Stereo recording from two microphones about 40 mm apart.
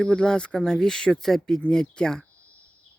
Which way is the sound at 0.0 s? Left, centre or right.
Left.